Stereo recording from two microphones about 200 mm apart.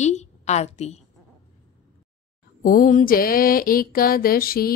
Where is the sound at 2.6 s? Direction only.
45° left (ahead or behind).